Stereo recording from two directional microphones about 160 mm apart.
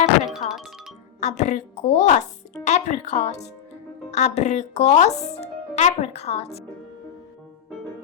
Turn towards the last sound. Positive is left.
turn(degrees=40)  # may be behind; listen again after turning